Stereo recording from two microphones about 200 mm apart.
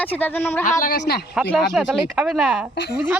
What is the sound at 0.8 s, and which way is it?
Speech, 50° left (ahead or behind).